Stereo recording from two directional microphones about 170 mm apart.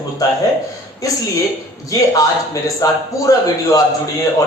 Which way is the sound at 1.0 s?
20° left (ahead or behind).